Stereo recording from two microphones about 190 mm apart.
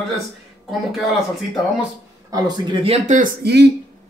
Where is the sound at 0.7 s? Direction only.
Centre (ahead or behind).